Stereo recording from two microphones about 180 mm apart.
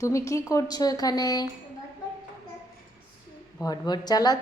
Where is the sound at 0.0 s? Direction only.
15° left (ahead or behind).